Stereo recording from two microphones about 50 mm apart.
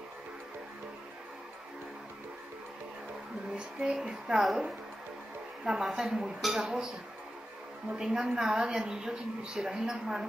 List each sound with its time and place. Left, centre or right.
3.5 s speech: centre
5.7 s a woman's voice: centre
8.0 s a woman's voice: centre